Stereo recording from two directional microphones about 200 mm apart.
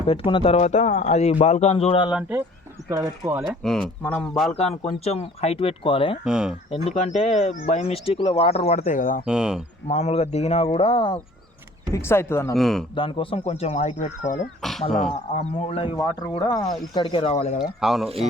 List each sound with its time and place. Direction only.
0.1 s speech: 25° left (ahead or behind)
2.9 s speech: 15° right (ahead or behind)
3.6 s speech: 5° left (ahead or behind)
4.5 s speech: 30° left (ahead or behind)
6.2 s speech: 5° right (ahead or behind)
6.7 s speech: 30° left (ahead or behind)
9.2 s speech: 5° right (ahead or behind)
9.8 s speech: 35° left (ahead or behind)
11.9 s speech: 10° left (ahead or behind)
12.5 s speech: centre (ahead or behind)
13.0 s speech: 25° left (ahead or behind)
14.6 s speech: centre (ahead or behind)
15.4 s speech: 30° left (ahead or behind)
17.6 s speech: centre (ahead or behind)